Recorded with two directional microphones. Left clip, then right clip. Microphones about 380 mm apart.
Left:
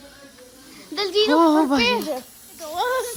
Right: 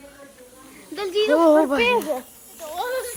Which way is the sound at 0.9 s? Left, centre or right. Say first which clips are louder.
Left 1 dB; centre.